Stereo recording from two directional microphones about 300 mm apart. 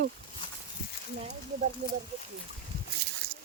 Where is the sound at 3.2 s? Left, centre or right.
Centre.